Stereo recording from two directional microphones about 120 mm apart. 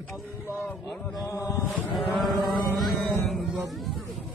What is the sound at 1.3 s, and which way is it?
Mantra, 25° left (ahead or behind).